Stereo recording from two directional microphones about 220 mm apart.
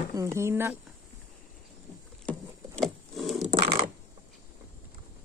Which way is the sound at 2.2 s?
5° left (ahead or behind).